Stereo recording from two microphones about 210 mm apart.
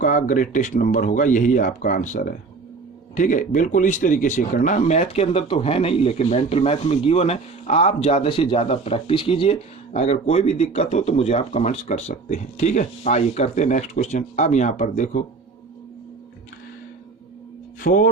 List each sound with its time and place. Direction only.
0.0 s a man's voice: 35° left (ahead or behind)
17.8 s a man's voice: 40° left (ahead or behind)